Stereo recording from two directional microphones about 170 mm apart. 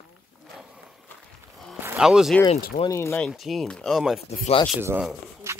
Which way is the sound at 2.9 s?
15° left (ahead or behind).